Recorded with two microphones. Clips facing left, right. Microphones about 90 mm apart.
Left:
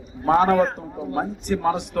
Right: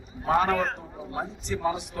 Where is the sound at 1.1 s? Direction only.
55° left (ahead or behind).